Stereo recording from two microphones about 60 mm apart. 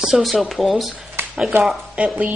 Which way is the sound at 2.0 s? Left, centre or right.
Right.